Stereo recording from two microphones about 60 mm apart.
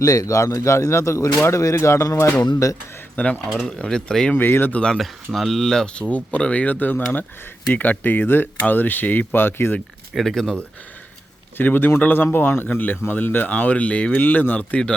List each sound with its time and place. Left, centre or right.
0.0 s speech: left
2.4 s speech: left
3.2 s speech: centre
4.4 s speech: left
4.9 s speech: centre; by 9.7 s left
10.2 s speech: centre
11.5 s speech: left